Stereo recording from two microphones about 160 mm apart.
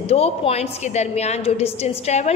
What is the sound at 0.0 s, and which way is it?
A woman's voice, 40° left (ahead or behind).